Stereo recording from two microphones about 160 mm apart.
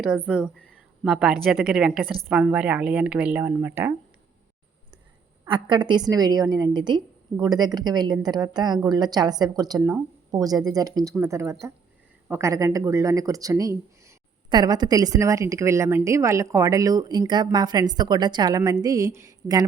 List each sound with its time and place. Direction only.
0.0 s a woman's voice: 5° right (ahead or behind)
5.5 s speech: 30° right (ahead or behind)
9.8 s a woman's voice: 10° right (ahead or behind)